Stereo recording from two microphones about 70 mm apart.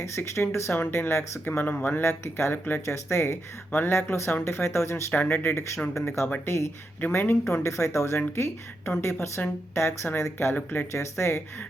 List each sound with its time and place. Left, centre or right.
0.0 s speech: left
2.0 s speech: left
2.8 s speech: left
3.7 s speech: left
5.1 s speech: left
7.6 s speech: left
10.5 s speech: left
10.9 s speech: left